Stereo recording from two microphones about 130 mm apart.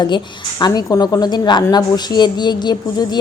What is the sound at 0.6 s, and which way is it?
A woman's voice, 30° left (ahead or behind).